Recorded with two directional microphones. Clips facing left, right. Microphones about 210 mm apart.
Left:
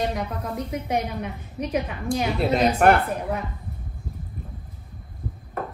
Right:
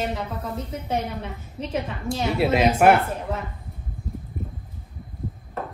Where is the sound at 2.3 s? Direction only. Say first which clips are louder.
Right 3 dB; 5° right (ahead or behind).